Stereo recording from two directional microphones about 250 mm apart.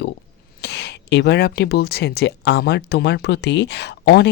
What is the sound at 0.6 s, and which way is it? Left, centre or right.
Speech, left.